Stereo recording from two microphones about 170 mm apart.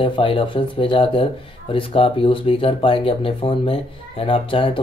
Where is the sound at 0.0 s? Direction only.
30° left (ahead or behind).